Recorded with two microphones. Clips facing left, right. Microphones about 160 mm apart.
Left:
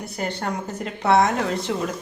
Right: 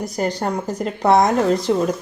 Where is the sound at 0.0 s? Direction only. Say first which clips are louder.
Right 6 dB; 40° right (ahead or behind).